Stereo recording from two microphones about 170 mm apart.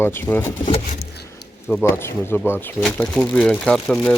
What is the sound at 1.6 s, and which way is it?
Speech, 10° left (ahead or behind).